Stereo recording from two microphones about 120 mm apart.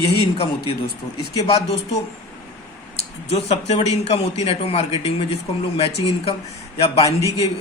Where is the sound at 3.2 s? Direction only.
60° left (ahead or behind).